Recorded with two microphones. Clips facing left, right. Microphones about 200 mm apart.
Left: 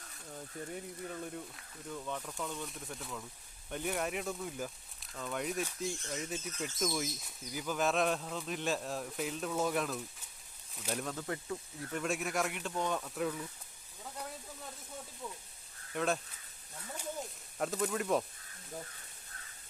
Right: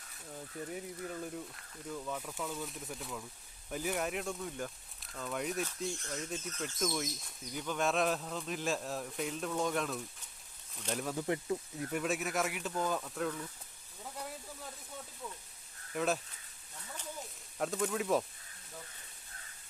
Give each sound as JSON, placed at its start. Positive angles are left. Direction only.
{"t": 0.3, "sound": "speech", "side_deg": 0}
{"t": 11.0, "sound": "speech", "side_deg": -15}
{"t": 11.9, "sound": "speech", "side_deg": -5}
{"t": 14.0, "sound": "a sound", "side_deg": -5}
{"t": 16.0, "sound": "speech", "side_deg": 0}
{"t": 17.6, "sound": "speech", "side_deg": 0}